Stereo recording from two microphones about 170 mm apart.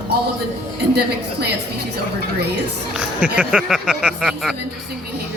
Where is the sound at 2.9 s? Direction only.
5° right (ahead or behind).